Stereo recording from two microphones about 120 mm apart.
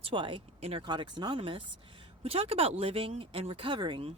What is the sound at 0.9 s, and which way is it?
Speech, 40° right (ahead or behind).